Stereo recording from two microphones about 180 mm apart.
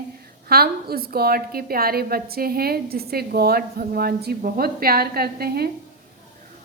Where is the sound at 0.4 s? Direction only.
60° right (ahead or behind).